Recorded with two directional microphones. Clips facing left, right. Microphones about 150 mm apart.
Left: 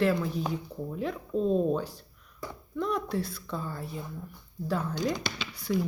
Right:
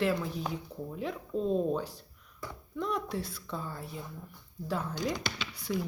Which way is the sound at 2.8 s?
15° right (ahead or behind).